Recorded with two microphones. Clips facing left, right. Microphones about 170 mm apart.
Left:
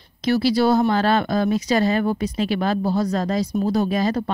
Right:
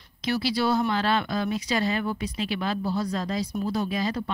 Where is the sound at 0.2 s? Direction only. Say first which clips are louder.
Left 7 dB; 40° left (ahead or behind).